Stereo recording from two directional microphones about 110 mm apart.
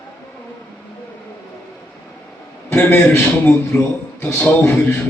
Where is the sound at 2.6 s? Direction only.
20° left (ahead or behind).